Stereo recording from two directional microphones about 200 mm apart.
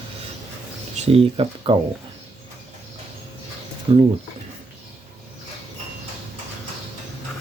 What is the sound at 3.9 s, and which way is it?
Speech, 30° right (ahead or behind).